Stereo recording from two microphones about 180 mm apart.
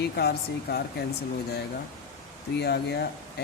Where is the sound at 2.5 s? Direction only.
65° left (ahead or behind).